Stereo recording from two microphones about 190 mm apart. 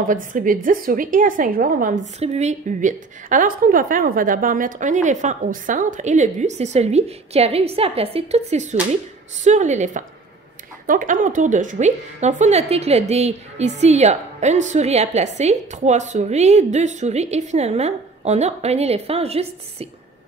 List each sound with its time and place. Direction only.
0.0 s a woman's voice: 45° right (ahead or behind)